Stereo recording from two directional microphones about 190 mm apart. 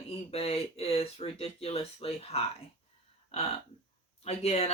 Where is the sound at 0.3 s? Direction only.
30° left (ahead or behind).